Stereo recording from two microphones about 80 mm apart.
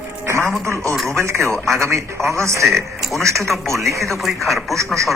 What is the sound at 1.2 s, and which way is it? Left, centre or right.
Speech, right.